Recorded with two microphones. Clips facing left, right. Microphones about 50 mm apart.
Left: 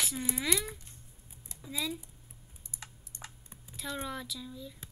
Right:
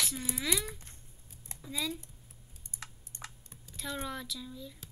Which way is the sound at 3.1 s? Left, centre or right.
Right.